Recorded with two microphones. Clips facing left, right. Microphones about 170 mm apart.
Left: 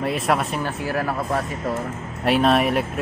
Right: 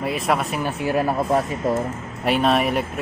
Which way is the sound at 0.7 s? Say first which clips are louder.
Right 3 dB; 20° right (ahead or behind).